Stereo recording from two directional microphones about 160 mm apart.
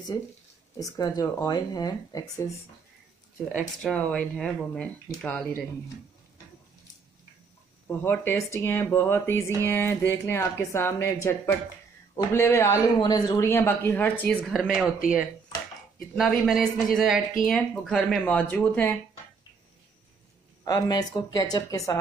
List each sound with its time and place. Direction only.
0.7 s speech: 20° left (ahead or behind)
3.4 s speech: centre (ahead or behind)
8.0 s speech: 15° left (ahead or behind)
14.5 s speech: centre (ahead or behind)
16.2 s speech: centre (ahead or behind)
20.6 s speech: 25° left (ahead or behind)